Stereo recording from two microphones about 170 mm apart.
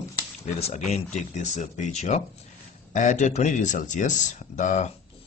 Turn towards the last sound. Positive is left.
turn(degrees=45)  # may be behind; listen again after turning